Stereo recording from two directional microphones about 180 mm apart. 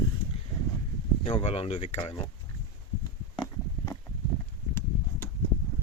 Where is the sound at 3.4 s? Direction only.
20° left (ahead or behind).